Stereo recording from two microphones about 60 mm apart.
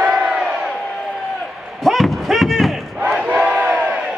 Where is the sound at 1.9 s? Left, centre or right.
Centre.